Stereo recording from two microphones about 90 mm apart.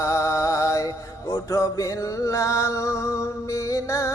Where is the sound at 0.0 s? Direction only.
35° left (ahead or behind).